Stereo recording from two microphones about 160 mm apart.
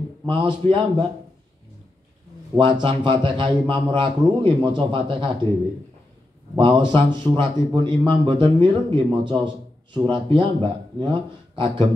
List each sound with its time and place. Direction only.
0.3 s a man's voice: 30° right (ahead or behind)
2.5 s a man's voice: 30° right (ahead or behind)
6.5 s a man's voice: 30° right (ahead or behind)